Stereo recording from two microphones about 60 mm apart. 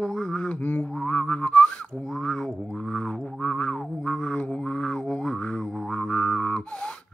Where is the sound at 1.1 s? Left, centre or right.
Left.